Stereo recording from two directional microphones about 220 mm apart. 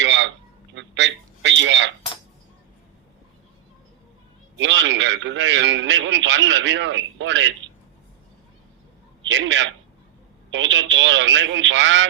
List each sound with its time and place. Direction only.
0.0 s a sound: 55° right (ahead or behind)
4.5 s a man's voice: 55° right (ahead or behind)
9.2 s a man's voice: 55° right (ahead or behind)